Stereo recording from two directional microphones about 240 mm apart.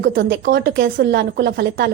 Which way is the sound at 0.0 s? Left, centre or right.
Right.